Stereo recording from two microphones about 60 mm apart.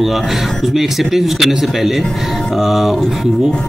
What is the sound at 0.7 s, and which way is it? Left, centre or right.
Speech, centre.